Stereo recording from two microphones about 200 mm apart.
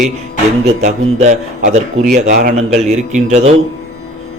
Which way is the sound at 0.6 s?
35° right (ahead or behind).